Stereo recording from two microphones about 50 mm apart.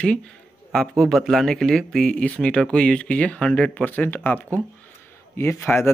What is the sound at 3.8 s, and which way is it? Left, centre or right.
Speech, left.